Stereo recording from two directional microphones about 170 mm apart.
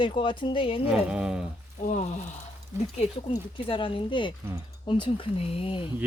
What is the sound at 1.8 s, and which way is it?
Speech, 45° left (ahead or behind).